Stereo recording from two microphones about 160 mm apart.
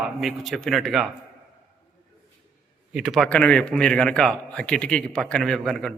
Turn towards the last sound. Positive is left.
turn(degrees=5)  # may be behind; listen again after turning